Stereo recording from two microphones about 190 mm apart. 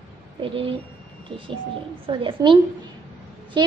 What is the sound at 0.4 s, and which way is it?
A woman's voice, 30° right (ahead or behind).